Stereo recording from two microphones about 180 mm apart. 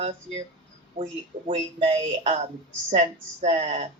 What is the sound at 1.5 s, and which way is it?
Speech, 30° right (ahead or behind).